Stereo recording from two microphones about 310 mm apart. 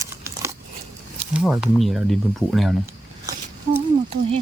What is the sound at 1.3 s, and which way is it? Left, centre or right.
Speech, centre.